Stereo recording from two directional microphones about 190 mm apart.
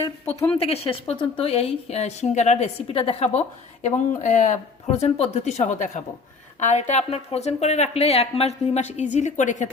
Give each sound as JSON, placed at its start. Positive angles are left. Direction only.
{"t": 0.0, "sound": "speech", "side_deg": 15}
{"t": 0.6, "sound": "a woman's voice", "side_deg": 30}